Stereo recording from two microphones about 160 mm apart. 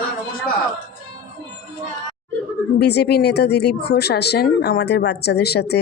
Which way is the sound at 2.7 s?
90° left.